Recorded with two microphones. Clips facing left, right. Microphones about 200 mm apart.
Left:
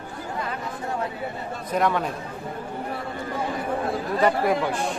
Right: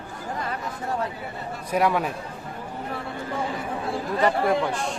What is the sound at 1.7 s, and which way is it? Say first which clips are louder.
Speech: right 1 dB; 10° right (ahead or behind).